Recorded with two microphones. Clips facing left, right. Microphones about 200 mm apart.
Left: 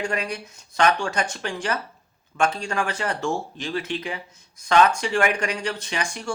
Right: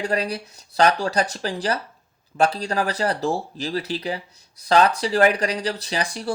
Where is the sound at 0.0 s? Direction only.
35° right (ahead or behind).